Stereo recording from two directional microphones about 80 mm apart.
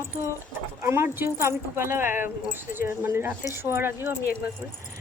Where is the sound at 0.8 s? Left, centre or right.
Right.